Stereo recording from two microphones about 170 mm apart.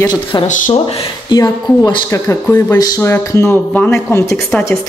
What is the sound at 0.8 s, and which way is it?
Speech, 35° left (ahead or behind).